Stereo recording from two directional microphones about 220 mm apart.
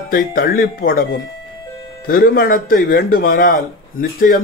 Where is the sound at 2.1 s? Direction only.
40° left (ahead or behind).